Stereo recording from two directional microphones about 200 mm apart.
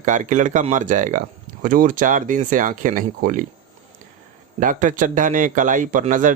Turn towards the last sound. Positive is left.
turn(degrees=-40)  # may be behind; listen again after turning